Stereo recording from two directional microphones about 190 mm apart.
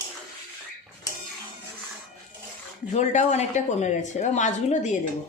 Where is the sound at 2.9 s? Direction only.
35° left (ahead or behind).